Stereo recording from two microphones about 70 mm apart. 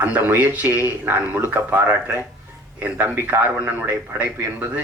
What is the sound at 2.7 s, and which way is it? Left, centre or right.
Speech, right.